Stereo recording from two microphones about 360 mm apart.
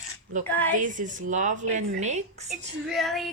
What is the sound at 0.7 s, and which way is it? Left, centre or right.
Speech, right.